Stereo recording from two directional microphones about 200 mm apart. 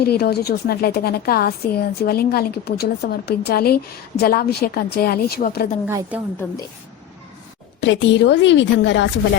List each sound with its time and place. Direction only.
0.0 s a woman's voice: 50° left (ahead or behind)
5.8 s a woman's voice: 10° right (ahead or behind)
7.8 s a woman's voice: 65° left (ahead or behind)